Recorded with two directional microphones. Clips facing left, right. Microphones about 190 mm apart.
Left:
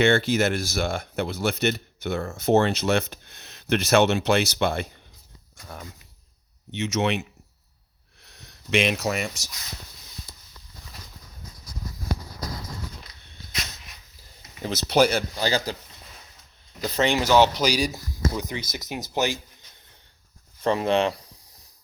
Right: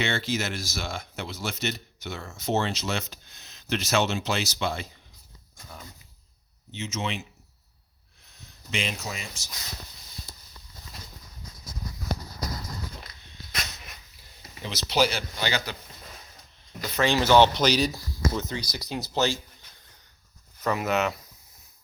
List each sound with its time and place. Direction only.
0.0 s speech: 55° left (ahead or behind)
6.7 s speech: 70° left (ahead or behind)
14.6 s speech: 50° left (ahead or behind)
17.2 s speech: 10° left (ahead or behind)
20.6 s speech: 30° left (ahead or behind)